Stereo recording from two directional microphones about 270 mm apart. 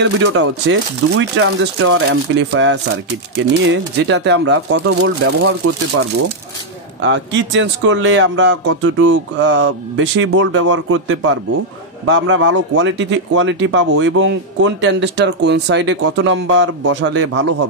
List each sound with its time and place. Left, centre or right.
0.0 s speech: right
7.0 s speech: right